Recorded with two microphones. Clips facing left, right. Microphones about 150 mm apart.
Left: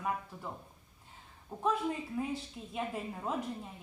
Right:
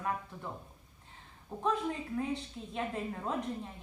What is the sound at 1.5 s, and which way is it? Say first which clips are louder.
Speech: right 1 dB; 5° left (ahead or behind).